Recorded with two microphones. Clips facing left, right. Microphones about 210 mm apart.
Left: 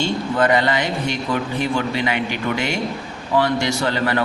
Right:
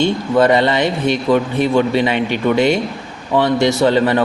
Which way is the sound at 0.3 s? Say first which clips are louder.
Right 6 dB; 25° right (ahead or behind).